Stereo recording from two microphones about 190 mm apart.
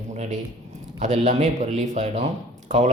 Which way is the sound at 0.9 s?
35° right (ahead or behind).